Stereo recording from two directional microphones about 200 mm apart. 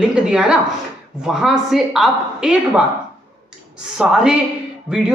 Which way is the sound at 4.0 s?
5° right (ahead or behind).